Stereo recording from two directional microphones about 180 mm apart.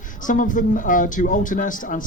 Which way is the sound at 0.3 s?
45° left (ahead or behind).